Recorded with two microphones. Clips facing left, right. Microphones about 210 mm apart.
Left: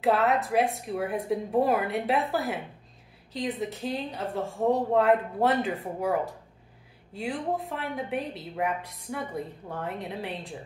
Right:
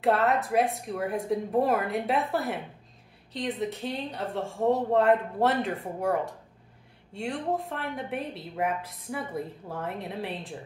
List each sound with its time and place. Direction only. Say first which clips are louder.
0.0 s a woman's voice: even; centre (ahead or behind)